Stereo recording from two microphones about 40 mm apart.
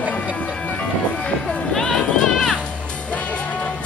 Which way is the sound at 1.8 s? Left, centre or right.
Centre.